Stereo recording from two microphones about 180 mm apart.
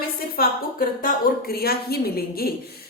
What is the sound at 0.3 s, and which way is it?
A woman's voice, 50° left (ahead or behind).